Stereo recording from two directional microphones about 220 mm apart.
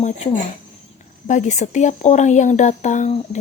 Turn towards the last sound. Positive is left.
turn(degrees=30)  # may be behind; listen again after turning